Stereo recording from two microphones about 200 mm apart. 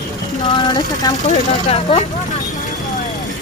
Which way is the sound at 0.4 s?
20° left (ahead or behind).